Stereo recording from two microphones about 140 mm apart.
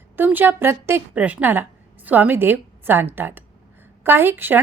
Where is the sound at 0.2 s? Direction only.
15° right (ahead or behind).